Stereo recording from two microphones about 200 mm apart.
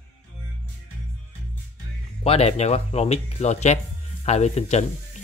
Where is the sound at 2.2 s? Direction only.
30° left (ahead or behind).